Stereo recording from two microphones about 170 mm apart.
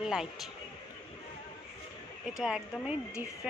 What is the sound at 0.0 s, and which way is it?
Speech, 5° right (ahead or behind).